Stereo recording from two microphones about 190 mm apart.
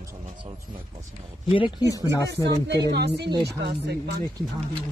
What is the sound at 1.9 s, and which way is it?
Speech, 15° left (ahead or behind).